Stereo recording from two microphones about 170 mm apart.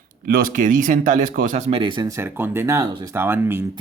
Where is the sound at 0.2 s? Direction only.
55° right (ahead or behind); by 3.7 s 15° right (ahead or behind).